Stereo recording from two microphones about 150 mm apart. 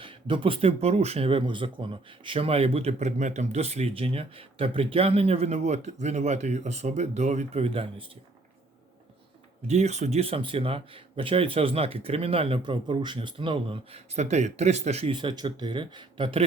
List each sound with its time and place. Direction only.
0.0 s speech: 35° right (ahead or behind)
9.6 s speech: 45° right (ahead or behind)
15.1 s speech: 30° right (ahead or behind)